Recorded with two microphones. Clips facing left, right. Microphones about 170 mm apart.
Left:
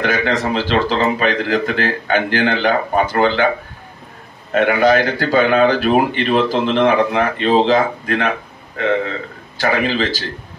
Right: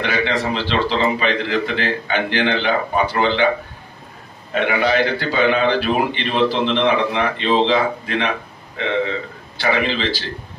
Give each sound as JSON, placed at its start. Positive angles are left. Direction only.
{"t": 0.0, "sound": "a man's voice", "side_deg": 45}
{"t": 4.6, "sound": "a man's voice", "side_deg": 45}